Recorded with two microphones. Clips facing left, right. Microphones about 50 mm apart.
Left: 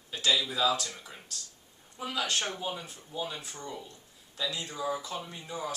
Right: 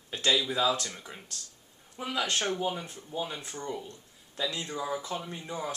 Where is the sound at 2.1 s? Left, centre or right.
Right.